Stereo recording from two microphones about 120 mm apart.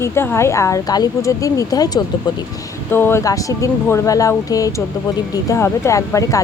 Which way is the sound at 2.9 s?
20° left (ahead or behind).